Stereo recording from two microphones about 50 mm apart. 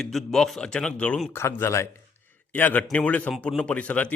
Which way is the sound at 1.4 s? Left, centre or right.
Left.